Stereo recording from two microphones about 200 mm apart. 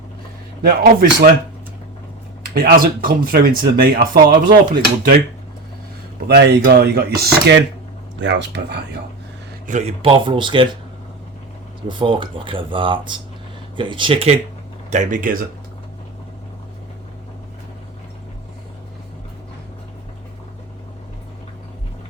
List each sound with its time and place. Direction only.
0.6 s speech: 50° right (ahead or behind)
2.6 s speech: 45° right (ahead or behind)
6.2 s a man's voice: 55° right (ahead or behind)
8.2 s a man's voice: 65° right (ahead or behind)
9.6 s speech: 35° right (ahead or behind)
11.9 s speech: 25° right (ahead or behind)
14.8 s speech: 40° right (ahead or behind)